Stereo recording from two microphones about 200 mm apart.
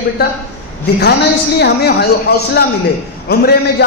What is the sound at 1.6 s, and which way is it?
A woman's voice, 55° left (ahead or behind).